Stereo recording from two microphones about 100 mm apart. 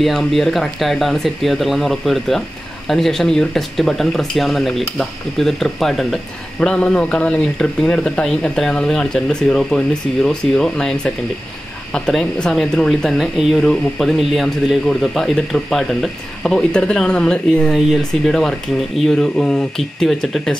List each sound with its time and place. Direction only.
0.0 s a man's voice: 5° left (ahead or behind)